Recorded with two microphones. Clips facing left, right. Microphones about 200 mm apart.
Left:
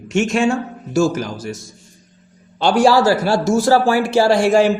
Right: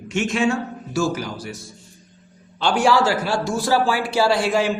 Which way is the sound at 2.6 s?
35° left (ahead or behind).